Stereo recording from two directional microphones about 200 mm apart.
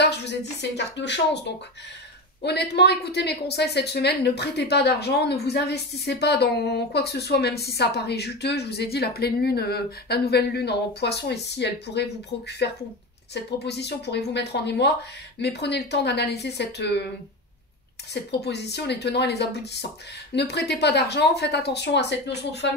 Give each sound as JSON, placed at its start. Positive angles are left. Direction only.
{"t": 0.0, "sound": "a woman's voice", "side_deg": 60}
{"t": 2.4, "sound": "a woman's voice", "side_deg": 55}
{"t": 18.1, "sound": "a woman's voice", "side_deg": 55}